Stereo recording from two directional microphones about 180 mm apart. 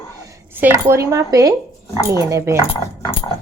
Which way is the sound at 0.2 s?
15° right (ahead or behind).